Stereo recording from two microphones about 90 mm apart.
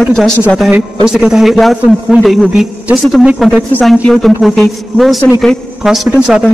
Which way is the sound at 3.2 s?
10° right (ahead or behind).